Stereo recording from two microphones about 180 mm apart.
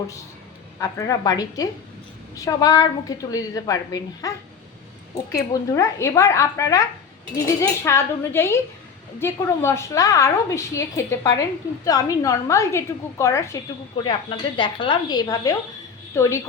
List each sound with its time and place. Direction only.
0.8 s a woman's voice: 20° left (ahead or behind)
5.4 s a woman's voice: 15° left (ahead or behind)
14.0 s a woman's voice: 25° left (ahead or behind)